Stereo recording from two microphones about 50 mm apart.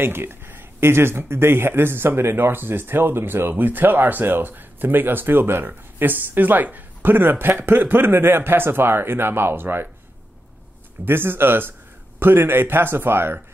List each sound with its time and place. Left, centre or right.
0.0 s speech: right
11.1 s speech: right